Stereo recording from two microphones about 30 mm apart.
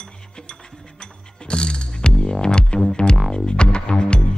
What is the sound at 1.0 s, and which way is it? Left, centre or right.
Music, left.